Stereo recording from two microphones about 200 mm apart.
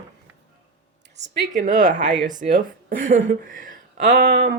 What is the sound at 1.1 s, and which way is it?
A woman's voice, 35° right (ahead or behind).